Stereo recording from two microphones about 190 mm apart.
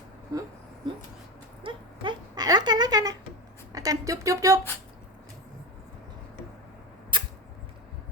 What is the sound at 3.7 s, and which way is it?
Speech, 20° right (ahead or behind).